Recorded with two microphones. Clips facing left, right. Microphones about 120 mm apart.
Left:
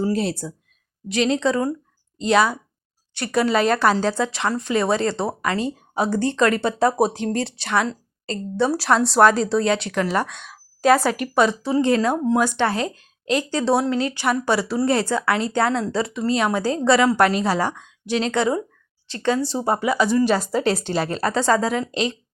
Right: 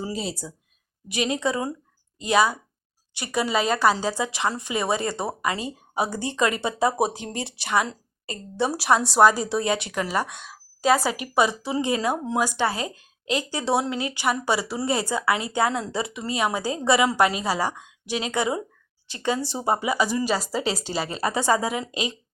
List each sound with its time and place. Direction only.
0.1 s speech: 55° left (ahead or behind)
1.0 s a woman's voice: 15° right (ahead or behind)